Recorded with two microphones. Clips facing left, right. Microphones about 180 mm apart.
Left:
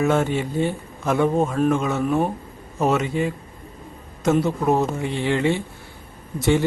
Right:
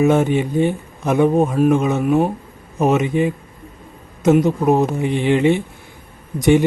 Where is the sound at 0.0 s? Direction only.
20° right (ahead or behind).